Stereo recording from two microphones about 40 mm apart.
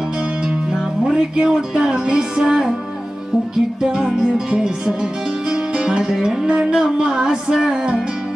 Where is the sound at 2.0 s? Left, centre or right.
Centre.